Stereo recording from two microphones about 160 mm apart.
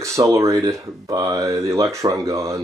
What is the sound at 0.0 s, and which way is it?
Speech, 20° right (ahead or behind).